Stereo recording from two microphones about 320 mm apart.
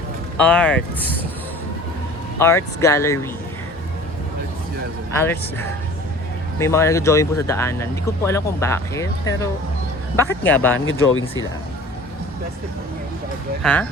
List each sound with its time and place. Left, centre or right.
0.4 s a man's voice: centre
2.4 s speech: centre
5.1 s a man's voice: centre
10.8 s speech: left
13.6 s a man's voice: centre